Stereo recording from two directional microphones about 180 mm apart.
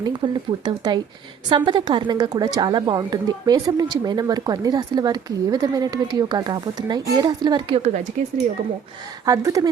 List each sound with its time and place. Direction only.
0.0 s a woman's voice: 25° right (ahead or behind)
9.2 s a woman's voice: 20° right (ahead or behind)